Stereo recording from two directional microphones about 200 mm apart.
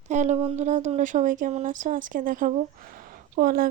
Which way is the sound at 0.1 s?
35° right (ahead or behind).